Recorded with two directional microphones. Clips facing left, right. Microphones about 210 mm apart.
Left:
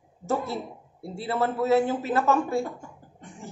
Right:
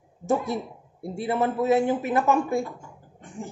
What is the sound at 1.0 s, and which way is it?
Speech, 15° right (ahead or behind).